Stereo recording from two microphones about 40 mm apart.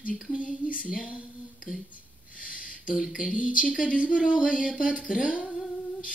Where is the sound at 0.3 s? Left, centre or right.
Right.